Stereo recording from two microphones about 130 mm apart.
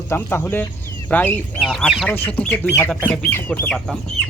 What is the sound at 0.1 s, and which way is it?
Speech, 20° left (ahead or behind).